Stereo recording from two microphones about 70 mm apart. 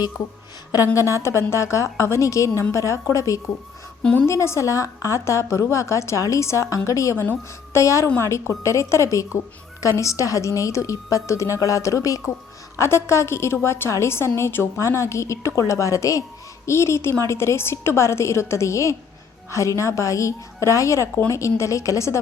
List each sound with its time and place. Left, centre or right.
0.9 s a woman's voice: left
4.0 s a woman's voice: centre
4.3 s a woman's voice: left
12.7 s a woman's voice: left
16.6 s a woman's voice: left